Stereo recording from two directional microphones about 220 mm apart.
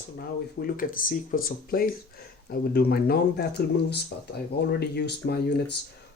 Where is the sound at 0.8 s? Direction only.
35° left (ahead or behind).